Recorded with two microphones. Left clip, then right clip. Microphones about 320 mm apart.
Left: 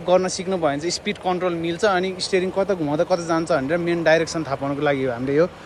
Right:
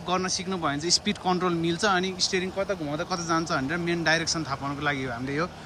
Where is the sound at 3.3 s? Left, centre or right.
Centre.